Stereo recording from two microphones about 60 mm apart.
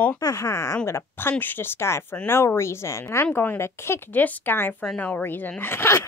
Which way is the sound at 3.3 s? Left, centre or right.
Left.